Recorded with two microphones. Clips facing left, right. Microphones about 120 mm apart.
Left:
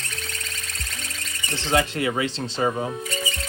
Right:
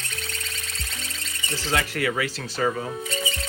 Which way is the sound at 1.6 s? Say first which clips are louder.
Left 4 dB; 25° left (ahead or behind).